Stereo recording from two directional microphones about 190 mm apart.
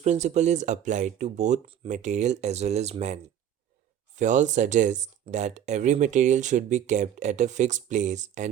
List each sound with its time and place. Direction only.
0.0 s speech: 40° right (ahead or behind)